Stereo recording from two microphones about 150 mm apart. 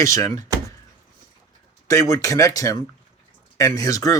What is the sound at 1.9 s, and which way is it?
Speech, 20° left (ahead or behind).